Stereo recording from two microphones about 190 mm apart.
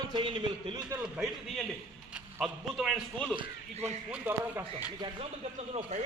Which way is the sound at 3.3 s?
25° right (ahead or behind).